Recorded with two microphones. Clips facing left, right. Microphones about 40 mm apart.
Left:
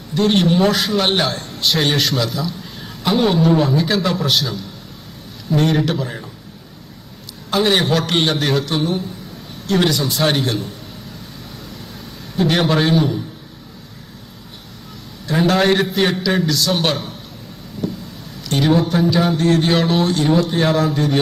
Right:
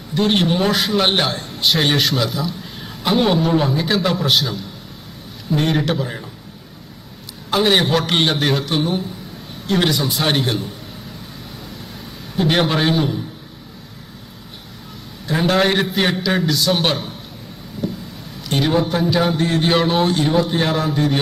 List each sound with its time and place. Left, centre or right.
0.1 s a man's voice: centre
7.5 s a man's voice: centre
12.4 s a man's voice: centre
15.3 s a man's voice: centre
17.8 s vehicle: centre
18.5 s a man's voice: centre